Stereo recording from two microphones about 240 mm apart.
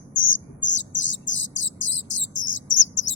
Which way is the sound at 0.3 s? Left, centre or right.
Left.